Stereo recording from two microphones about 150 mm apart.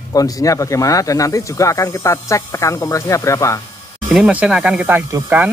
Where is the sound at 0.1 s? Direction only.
25° left (ahead or behind).